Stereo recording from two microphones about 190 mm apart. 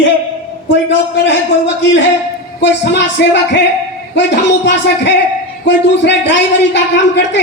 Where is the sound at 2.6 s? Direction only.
65° left (ahead or behind).